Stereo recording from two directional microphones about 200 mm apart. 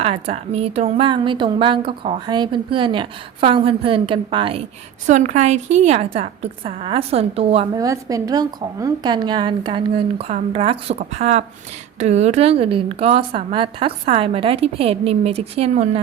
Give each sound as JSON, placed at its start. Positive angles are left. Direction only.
{"t": 0.0, "sound": "a woman's voice", "side_deg": -30}
{"t": 5.0, "sound": "a woman's voice", "side_deg": -35}
{"t": 7.8, "sound": "a woman's voice", "side_deg": -15}